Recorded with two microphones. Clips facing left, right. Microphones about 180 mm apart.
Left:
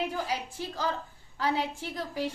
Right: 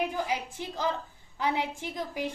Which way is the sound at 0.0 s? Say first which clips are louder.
Right 1 dB; 20° right (ahead or behind).